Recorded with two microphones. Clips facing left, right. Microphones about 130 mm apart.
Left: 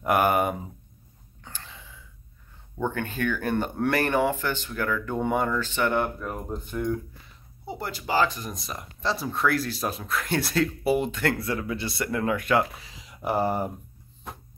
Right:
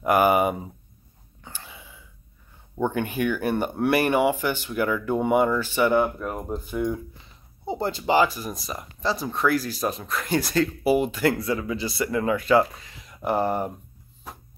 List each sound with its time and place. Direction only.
0.0 s speech: centre (ahead or behind)
1.4 s a sound: 10° right (ahead or behind)
2.8 s speech: 15° right (ahead or behind)
7.6 s speech: 25° right (ahead or behind)
8.2 s speech: 5° right (ahead or behind)